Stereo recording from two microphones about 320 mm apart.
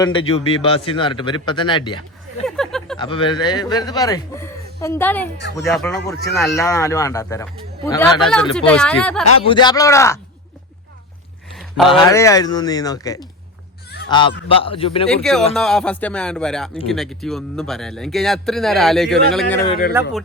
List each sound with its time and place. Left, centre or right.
0.0 s speech: centre
2.6 s speech: centre
3.0 s a man's voice: centre
9.4 s speech: centre
11.9 s speech: centre
15.1 s a man's voice: centre